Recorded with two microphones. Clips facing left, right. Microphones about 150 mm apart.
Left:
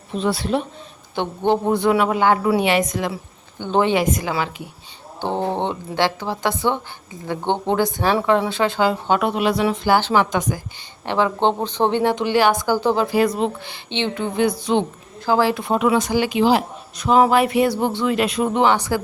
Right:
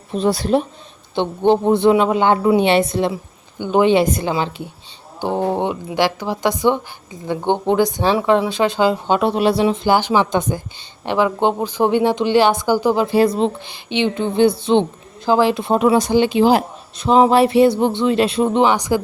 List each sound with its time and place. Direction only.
0.1 s speech: 40° right (ahead or behind)
1.1 s speech: 20° right (ahead or behind)
3.6 s speech: 15° right (ahead or behind)
3.9 s speech: 30° right (ahead or behind)
5.2 s speech: 10° right (ahead or behind)
9.3 s speech: 35° right (ahead or behind); by 10.2 s 15° right (ahead or behind)
10.3 s speech: 30° right (ahead or behind)
11.0 s speech: 15° right (ahead or behind)
13.1 s speech: 30° right (ahead or behind)
13.9 s speech: 15° right (ahead or behind)
14.3 s speech: 30° right (ahead or behind)
16.4 s speech: 45° right (ahead or behind)
17.0 s speech: 25° right (ahead or behind)